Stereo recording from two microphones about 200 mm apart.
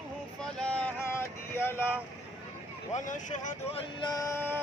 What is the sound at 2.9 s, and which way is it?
Speech, 40° left (ahead or behind).